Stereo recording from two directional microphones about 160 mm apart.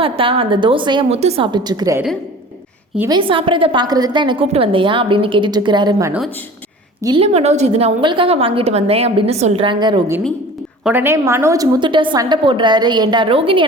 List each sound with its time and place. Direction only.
0.0 s a woman's voice: 35° right (ahead or behind)
3.1 s a woman's voice: 30° right (ahead or behind)
7.2 s a woman's voice: 40° right (ahead or behind)
10.8 s a woman's voice: 15° right (ahead or behind); by 13.7 s 35° right (ahead or behind)